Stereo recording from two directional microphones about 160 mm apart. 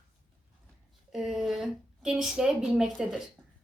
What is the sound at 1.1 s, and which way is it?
A woman's voice, centre (ahead or behind).